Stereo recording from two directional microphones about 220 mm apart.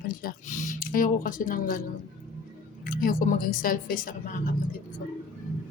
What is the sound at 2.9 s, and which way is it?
Speech, 40° left (ahead or behind).